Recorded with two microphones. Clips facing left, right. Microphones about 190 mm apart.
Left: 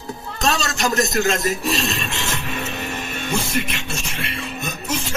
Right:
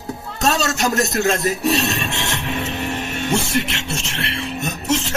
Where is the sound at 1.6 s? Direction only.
70° right (ahead or behind).